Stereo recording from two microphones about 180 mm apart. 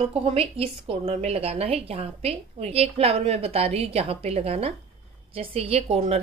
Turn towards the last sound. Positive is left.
turn(degrees=-35)  # may be behind; listen again after turning